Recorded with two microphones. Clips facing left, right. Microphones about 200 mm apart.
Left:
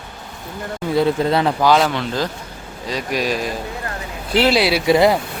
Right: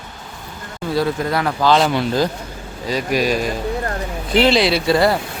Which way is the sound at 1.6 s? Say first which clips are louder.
Right 1 dB; 5° left (ahead or behind).